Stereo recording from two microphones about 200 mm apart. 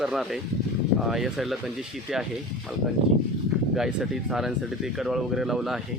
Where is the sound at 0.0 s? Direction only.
Centre (ahead or behind).